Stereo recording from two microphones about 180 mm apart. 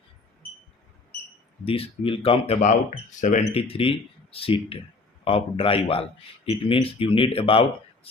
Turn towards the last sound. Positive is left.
turn(degrees=30)  # may be behind; listen again after turning